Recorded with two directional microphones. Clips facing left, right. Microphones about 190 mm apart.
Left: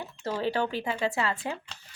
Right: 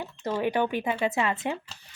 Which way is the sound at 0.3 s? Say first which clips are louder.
Right 2 dB; 15° right (ahead or behind).